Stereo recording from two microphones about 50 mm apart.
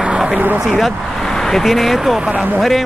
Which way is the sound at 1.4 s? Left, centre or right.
Centre.